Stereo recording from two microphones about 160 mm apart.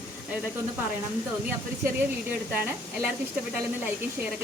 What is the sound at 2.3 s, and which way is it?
Speech, 10° right (ahead or behind).